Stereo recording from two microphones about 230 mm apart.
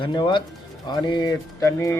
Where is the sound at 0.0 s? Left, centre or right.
Centre.